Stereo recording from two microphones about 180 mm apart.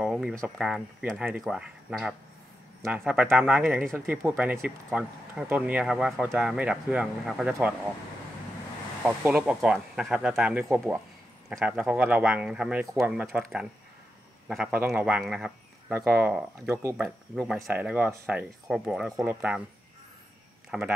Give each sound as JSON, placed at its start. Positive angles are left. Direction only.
{"t": 0.0, "sound": "speech", "side_deg": -5}
{"t": 4.1, "sound": "speech", "side_deg": -10}
{"t": 9.0, "sound": "speech", "side_deg": -5}
{"t": 12.8, "sound": "speech", "side_deg": -15}
{"t": 13.1, "sound": "speech", "side_deg": -5}
{"t": 14.5, "sound": "speech", "side_deg": -5}
{"t": 17.0, "sound": "speech", "side_deg": -5}
{"t": 20.7, "sound": "speech", "side_deg": -5}